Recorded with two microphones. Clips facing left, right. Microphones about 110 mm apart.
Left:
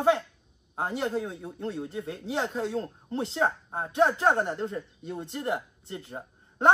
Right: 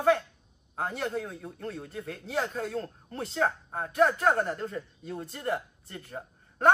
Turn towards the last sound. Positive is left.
turn(degrees=25)  # may be behind; listen again after turning